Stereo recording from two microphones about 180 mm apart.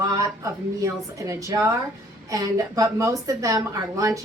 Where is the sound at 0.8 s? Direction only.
15° right (ahead or behind).